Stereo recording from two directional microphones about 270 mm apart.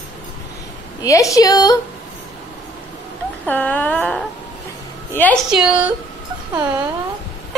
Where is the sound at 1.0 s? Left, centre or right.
Centre.